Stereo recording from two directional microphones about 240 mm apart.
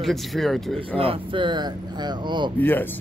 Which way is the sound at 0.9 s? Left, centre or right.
Right.